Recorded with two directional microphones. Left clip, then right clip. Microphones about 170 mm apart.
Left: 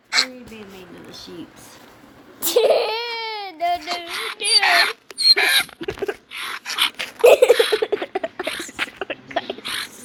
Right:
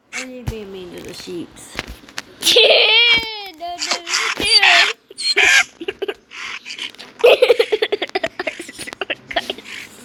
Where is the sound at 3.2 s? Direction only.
15° left (ahead or behind).